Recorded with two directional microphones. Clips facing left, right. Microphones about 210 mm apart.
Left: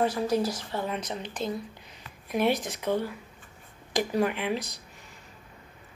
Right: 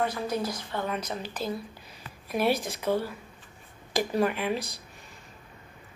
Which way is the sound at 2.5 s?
20° left (ahead or behind).